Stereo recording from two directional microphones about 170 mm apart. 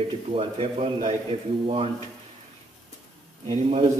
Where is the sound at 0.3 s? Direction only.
35° right (ahead or behind).